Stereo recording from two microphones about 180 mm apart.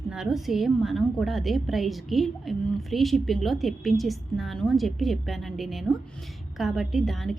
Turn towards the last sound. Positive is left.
turn(degrees=0)  # may be behind; listen again after turning